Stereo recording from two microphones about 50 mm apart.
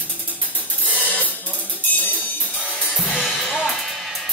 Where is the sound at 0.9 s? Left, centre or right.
Left.